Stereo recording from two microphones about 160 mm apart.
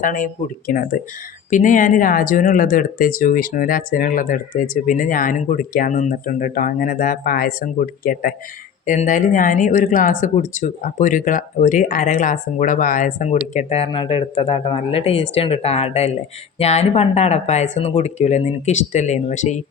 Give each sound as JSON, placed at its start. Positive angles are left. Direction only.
{"t": 0.0, "sound": "speech", "side_deg": 55}